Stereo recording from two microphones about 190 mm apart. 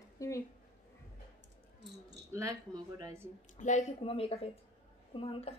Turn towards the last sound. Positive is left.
turn(degrees=30)  # may be behind; listen again after turning